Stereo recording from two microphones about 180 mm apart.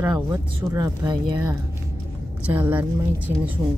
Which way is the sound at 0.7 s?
20° right (ahead or behind).